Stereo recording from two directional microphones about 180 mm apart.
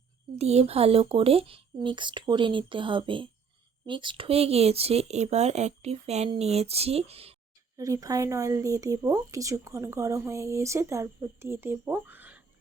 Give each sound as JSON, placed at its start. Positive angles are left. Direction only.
{"t": 0.3, "sound": "speech", "side_deg": -35}
{"t": 7.8, "sound": "speech", "side_deg": -20}